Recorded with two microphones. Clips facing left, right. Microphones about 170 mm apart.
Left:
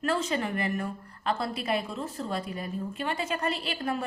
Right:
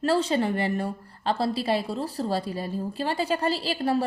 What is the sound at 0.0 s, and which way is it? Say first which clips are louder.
A woman's voice: right 5 dB; 30° right (ahead or behind).